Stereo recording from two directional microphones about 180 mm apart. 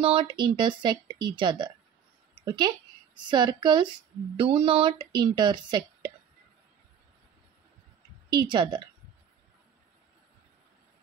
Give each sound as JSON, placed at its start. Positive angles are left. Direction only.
{"t": 0.0, "sound": "a woman's voice", "side_deg": -30}
{"t": 8.3, "sound": "speech", "side_deg": -25}